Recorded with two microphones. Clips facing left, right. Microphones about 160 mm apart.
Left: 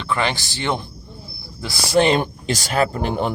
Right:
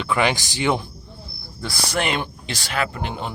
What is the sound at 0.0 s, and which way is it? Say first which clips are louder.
Speech: right 2 dB; 10° right (ahead or behind).